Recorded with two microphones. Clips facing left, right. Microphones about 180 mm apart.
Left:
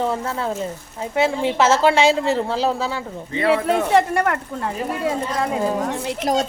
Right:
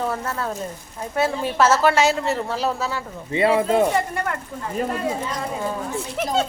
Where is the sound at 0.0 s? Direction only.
20° left (ahead or behind).